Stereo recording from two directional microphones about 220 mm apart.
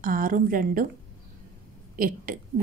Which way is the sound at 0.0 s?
40° right (ahead or behind).